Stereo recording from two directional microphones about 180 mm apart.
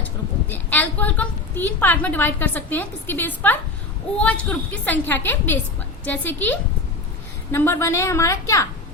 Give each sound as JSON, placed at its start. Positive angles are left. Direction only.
{"t": 0.0, "sound": "a woman's voice", "side_deg": 10}